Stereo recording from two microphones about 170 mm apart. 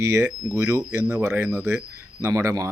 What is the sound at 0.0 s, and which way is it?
Speech, 20° right (ahead or behind).